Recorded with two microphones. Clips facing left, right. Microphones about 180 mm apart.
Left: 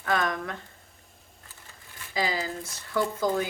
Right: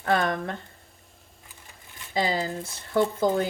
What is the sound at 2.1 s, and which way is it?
Speech, 25° right (ahead or behind).